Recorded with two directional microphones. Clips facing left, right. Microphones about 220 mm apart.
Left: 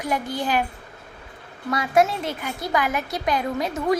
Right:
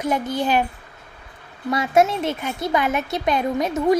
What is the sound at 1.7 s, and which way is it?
Speech, 25° right (ahead or behind).